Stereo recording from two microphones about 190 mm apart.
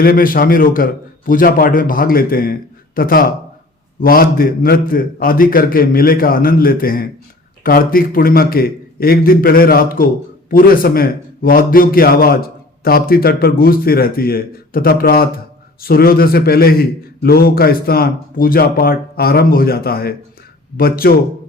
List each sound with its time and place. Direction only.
0.0 s a man's voice: 50° left (ahead or behind)